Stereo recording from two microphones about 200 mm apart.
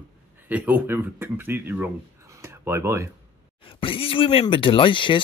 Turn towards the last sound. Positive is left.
turn(degrees=25)  # may be behind; listen again after turning